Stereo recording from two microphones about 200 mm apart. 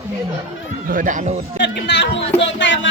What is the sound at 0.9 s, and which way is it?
Speech, 40° right (ahead or behind).